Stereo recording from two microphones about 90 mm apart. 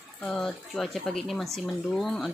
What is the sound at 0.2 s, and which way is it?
Speech, 5° left (ahead or behind).